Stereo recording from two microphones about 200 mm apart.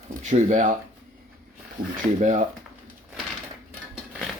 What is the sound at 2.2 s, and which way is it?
Speech, 40° right (ahead or behind).